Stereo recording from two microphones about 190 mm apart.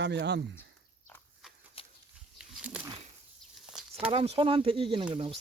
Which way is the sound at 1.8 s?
30° left (ahead or behind).